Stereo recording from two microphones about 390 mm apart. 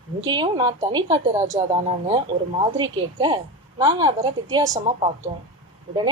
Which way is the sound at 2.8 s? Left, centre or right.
Centre.